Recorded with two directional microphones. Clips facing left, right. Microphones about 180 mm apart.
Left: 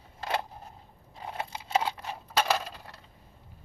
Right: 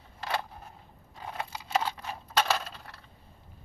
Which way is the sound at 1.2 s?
25° left (ahead or behind).